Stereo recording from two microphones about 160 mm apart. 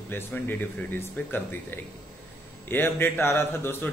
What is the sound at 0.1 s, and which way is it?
A man's voice, 10° left (ahead or behind).